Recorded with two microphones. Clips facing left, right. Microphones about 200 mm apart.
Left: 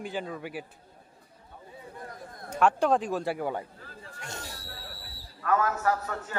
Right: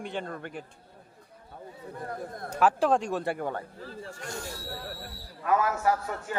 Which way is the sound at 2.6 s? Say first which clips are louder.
Even; centre (ahead or behind).